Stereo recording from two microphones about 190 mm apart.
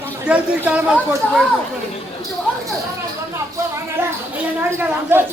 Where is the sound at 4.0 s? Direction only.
10° right (ahead or behind).